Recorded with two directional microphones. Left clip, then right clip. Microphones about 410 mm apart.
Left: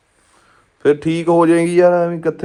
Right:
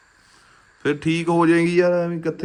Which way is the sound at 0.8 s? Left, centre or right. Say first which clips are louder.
Left 7 dB; centre.